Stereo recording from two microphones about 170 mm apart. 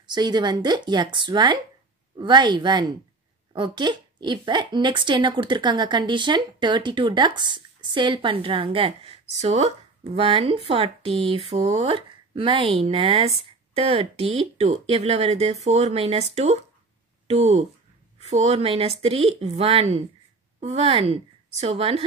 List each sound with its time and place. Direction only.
0.0 s speech: 25° right (ahead or behind)